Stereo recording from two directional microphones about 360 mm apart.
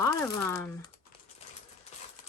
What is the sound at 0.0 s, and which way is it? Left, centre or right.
Speech, centre.